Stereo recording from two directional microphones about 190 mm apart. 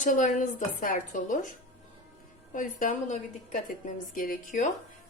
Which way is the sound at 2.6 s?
45° left (ahead or behind).